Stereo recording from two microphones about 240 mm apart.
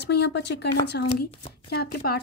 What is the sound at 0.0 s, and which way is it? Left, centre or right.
A woman's voice, left.